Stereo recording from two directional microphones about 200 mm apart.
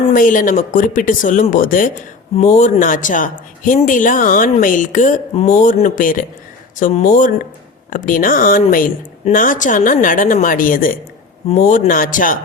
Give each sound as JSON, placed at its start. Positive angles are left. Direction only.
{"t": 0.1, "sound": "speech", "side_deg": 40}